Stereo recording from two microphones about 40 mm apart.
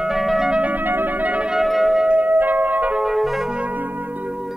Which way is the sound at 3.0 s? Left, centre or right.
Centre.